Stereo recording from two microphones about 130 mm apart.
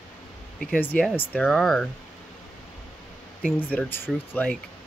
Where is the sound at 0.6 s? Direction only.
10° left (ahead or behind).